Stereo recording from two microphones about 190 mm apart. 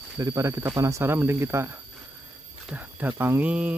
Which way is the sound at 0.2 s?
15° right (ahead or behind).